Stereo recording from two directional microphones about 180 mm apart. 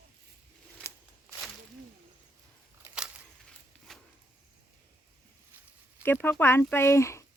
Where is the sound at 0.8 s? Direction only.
15° left (ahead or behind).